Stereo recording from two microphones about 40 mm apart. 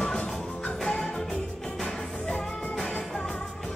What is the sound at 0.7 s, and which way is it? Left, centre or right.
Music, centre.